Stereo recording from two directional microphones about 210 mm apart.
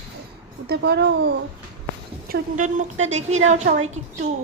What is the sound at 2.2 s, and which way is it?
Speech, 40° right (ahead or behind).